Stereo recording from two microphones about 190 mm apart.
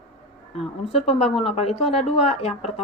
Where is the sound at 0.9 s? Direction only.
35° left (ahead or behind).